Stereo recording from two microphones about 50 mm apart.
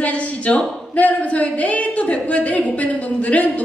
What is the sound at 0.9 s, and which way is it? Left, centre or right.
A woman's voice, left.